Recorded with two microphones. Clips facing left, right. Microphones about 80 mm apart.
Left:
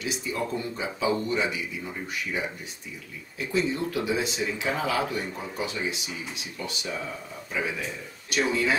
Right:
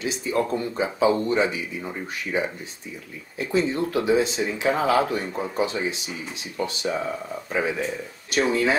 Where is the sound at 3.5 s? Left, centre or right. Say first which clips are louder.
Right 4 dB; right.